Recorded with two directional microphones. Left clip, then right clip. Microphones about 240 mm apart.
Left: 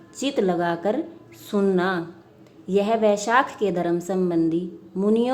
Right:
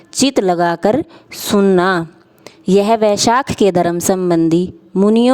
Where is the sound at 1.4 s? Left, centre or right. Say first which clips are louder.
Right 10 dB; right.